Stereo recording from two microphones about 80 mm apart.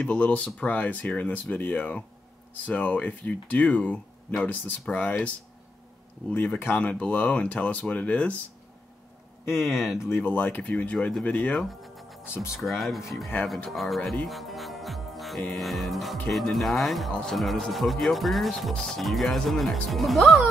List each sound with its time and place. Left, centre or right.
0.0 s speech: centre
6.3 s speech: left
9.4 s speech: left
9.7 s speech: centre
10.0 s speech: left
11.6 s music: centre
12.5 s speech: centre
14.2 s music: centre
15.5 s speech: centre